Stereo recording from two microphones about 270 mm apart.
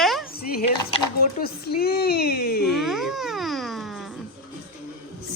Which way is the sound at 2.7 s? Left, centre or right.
Centre.